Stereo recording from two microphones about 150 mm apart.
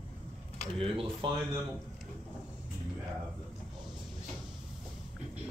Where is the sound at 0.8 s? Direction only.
35° right (ahead or behind).